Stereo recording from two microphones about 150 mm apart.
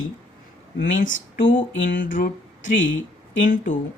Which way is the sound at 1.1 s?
60° left (ahead or behind).